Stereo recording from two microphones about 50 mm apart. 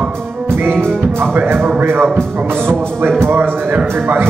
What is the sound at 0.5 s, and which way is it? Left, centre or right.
Music, right.